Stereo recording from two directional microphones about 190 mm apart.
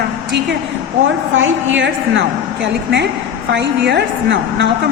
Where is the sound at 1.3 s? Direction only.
85° right.